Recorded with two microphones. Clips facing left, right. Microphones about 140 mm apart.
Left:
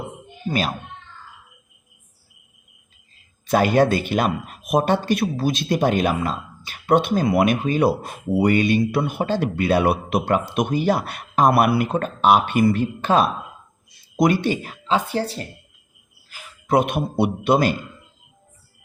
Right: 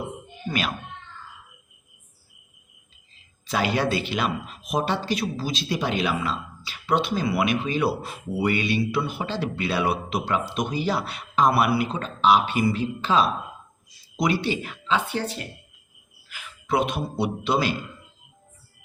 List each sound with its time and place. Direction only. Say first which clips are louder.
0.4 s speech: left 4 dB; 40° left (ahead or behind)
3.4 s a man's voice: left 7 dB; 50° left (ahead or behind)